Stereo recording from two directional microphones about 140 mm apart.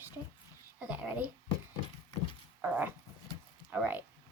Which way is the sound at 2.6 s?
10° right (ahead or behind).